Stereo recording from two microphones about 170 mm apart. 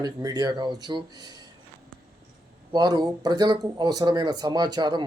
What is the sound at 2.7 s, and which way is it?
Speech, 25° right (ahead or behind).